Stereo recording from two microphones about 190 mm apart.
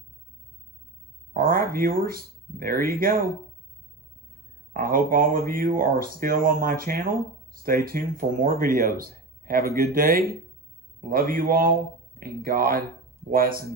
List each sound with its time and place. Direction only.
1.3 s speech: 50° right (ahead or behind)
4.7 s speech: 50° right (ahead or behind)